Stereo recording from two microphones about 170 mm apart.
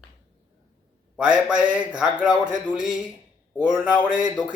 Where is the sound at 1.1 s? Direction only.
5° right (ahead or behind).